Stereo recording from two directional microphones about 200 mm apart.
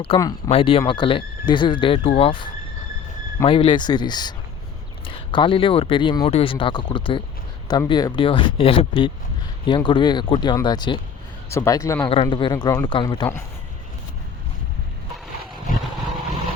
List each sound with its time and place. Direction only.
0.2 s speech: 15° left (ahead or behind)
0.5 s speech: 30° left (ahead or behind)
12.1 s speech: 25° left (ahead or behind)